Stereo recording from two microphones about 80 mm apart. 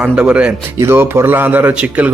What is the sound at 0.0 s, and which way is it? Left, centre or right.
Speech, centre.